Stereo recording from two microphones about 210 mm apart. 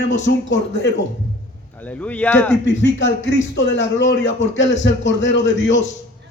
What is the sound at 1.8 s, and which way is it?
Speech, 5° left (ahead or behind).